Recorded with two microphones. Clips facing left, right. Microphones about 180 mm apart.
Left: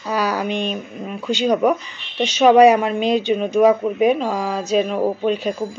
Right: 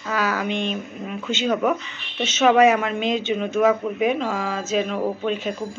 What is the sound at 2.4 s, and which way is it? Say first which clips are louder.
Speech: left 5 dB; 35° left (ahead or behind).